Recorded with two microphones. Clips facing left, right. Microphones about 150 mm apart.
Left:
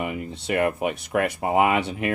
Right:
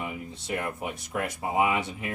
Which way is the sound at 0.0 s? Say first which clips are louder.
Left 7 dB; 75° left (ahead or behind).